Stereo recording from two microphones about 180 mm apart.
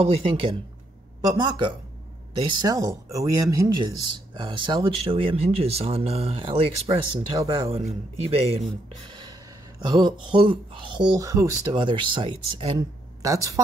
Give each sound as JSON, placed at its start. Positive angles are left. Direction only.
{"t": 0.0, "sound": "speech", "side_deg": -30}
{"t": 9.1, "sound": "gasp", "side_deg": -25}
{"t": 9.8, "sound": "speech", "side_deg": -25}